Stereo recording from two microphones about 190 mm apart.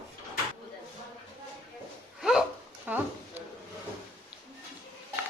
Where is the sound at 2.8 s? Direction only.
10° right (ahead or behind).